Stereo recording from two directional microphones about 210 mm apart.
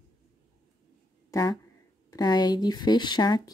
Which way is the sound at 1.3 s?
15° left (ahead or behind).